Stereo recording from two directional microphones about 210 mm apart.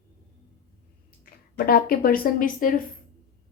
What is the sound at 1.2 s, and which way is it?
Speech, 45° left (ahead or behind).